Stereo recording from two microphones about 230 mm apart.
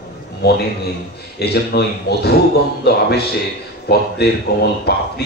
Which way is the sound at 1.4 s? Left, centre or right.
Left.